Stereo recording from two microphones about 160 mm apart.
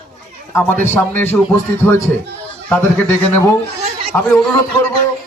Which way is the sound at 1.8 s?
15° left (ahead or behind).